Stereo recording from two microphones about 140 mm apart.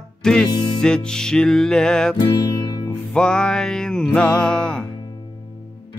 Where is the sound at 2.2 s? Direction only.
30° left (ahead or behind).